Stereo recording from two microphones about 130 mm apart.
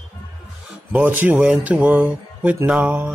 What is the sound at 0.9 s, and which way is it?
Speech, 10° right (ahead or behind).